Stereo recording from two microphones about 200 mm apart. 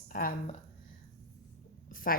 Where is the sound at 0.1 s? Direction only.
45° left (ahead or behind).